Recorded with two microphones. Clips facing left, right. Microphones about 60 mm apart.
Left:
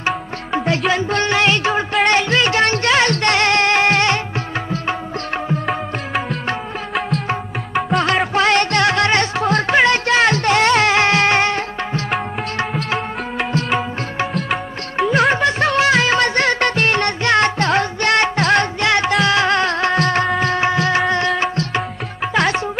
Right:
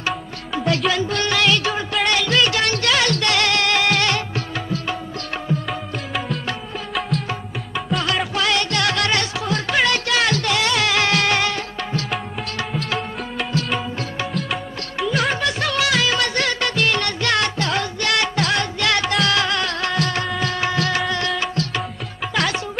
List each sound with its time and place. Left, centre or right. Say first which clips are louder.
0.5 s music: left 2 dB; left
7.7 s music: left 6 dB; left
8.4 s music: left 7 dB; left
15.3 s music: left 6 dB; left